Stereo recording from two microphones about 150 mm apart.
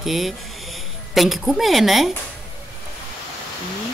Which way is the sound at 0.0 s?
Centre (ahead or behind).